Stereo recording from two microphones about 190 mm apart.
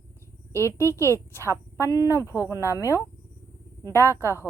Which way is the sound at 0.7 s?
15° left (ahead or behind).